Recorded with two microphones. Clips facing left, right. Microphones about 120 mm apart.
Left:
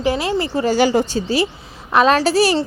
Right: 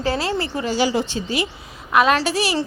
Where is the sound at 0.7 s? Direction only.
50° left (ahead or behind).